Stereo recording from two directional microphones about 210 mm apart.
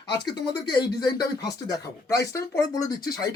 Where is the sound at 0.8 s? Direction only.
20° left (ahead or behind).